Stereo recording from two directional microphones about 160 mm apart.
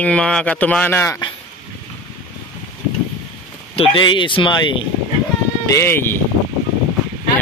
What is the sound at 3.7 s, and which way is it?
Speech, 30° left (ahead or behind).